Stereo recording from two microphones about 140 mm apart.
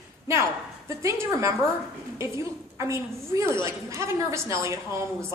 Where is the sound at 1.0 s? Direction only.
20° right (ahead or behind).